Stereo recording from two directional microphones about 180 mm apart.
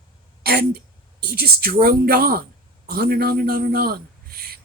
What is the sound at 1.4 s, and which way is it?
A man's voice, 55° right (ahead or behind).